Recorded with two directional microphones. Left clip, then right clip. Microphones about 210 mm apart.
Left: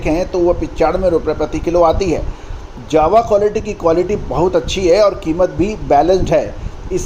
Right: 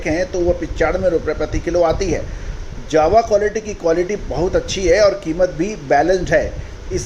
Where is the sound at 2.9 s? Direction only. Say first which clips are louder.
Left 2 dB; 45° left (ahead or behind).